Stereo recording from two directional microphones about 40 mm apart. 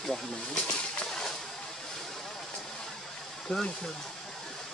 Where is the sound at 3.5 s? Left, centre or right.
Centre.